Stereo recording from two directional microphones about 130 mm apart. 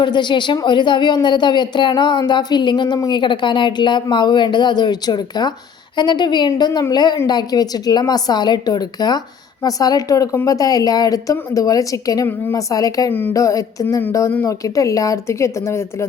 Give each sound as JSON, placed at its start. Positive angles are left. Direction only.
{"t": 0.0, "sound": "a woman's voice", "side_deg": 35}
{"t": 13.1, "sound": "speech", "side_deg": 15}